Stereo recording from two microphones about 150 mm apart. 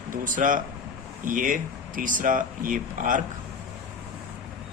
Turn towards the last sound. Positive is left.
turn(degrees=-60)  # may be behind; listen again after turning